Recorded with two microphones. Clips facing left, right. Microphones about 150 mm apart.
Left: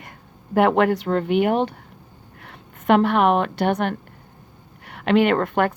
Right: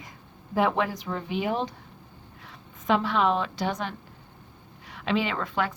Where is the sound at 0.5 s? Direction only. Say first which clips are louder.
Left 8 dB; 65° left (ahead or behind).